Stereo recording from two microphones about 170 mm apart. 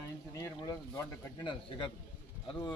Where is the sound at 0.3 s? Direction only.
20° left (ahead or behind).